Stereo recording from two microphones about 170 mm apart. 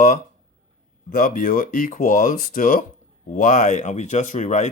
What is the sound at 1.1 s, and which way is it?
Speech, 55° left (ahead or behind).